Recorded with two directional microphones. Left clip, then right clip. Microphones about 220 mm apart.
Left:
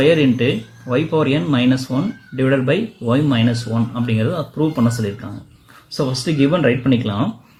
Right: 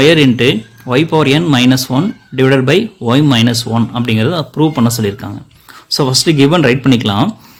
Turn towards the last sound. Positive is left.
turn(degrees=-50)  # may be behind; listen again after turning